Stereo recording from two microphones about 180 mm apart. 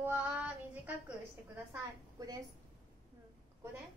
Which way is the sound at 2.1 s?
20° right (ahead or behind).